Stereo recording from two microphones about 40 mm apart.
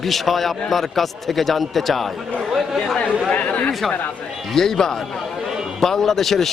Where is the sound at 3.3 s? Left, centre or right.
Left.